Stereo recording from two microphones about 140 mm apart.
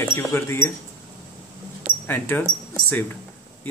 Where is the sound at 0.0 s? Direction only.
15° left (ahead or behind).